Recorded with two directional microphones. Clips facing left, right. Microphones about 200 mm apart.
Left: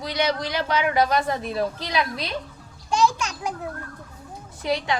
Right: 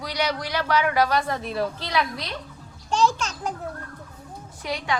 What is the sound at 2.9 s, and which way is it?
Children playing, 10° left (ahead or behind).